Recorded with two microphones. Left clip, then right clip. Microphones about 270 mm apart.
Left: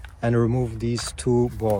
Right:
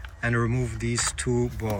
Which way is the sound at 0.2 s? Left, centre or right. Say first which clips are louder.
Left 4 dB; centre.